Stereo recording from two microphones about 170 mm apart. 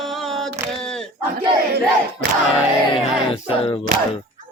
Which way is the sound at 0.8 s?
5° left (ahead or behind).